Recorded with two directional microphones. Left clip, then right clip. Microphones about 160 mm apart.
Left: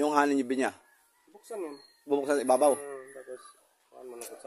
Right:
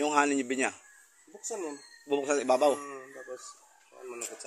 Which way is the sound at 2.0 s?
35° left (ahead or behind).